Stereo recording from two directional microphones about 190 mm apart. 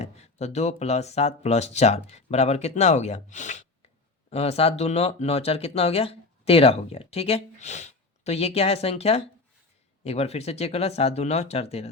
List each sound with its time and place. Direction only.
0.0 s speech: 35° left (ahead or behind)